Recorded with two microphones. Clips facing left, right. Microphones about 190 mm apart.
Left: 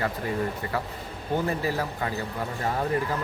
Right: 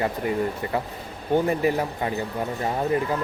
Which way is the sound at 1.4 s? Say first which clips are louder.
Right 5 dB; 20° right (ahead or behind).